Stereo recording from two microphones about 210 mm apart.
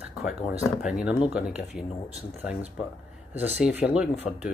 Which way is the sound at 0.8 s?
5° right (ahead or behind).